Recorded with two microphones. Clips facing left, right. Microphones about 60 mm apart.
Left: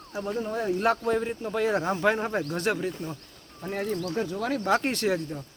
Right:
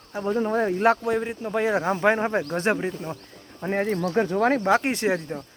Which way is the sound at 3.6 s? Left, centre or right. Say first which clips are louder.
Right 5 dB; right.